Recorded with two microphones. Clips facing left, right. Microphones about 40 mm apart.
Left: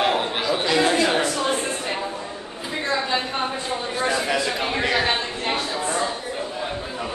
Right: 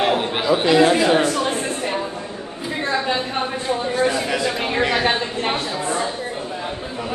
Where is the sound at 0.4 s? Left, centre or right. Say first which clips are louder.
Right 8 dB; centre.